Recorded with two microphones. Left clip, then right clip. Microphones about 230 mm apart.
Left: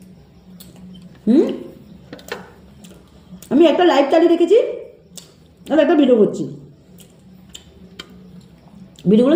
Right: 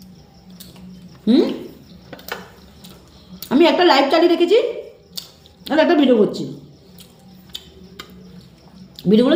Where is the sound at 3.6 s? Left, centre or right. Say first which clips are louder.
Even; right.